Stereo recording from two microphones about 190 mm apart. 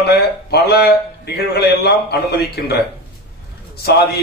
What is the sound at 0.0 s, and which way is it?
A man's voice, 55° left (ahead or behind).